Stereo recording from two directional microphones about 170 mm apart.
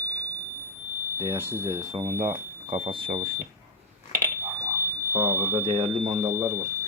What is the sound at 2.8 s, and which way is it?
Speech, 30° right (ahead or behind).